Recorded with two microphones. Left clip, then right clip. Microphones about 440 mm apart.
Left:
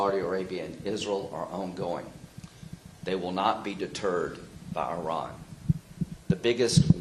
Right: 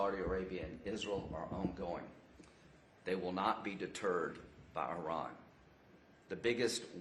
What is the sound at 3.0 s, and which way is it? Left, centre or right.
Speech, left.